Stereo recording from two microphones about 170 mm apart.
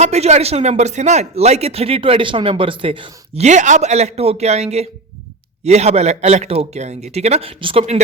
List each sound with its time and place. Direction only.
0.0 s speech: 40° right (ahead or behind)